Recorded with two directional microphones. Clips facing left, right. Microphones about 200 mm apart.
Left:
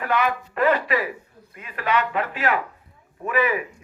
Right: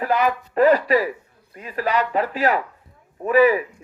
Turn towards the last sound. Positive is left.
turn(degrees=-35)  # may be behind; listen again after turning